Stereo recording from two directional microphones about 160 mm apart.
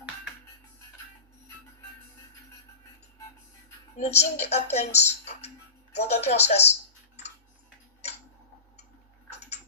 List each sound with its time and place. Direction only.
3.9 s speech: 45° left (ahead or behind)
6.0 s speech: 40° left (ahead or behind)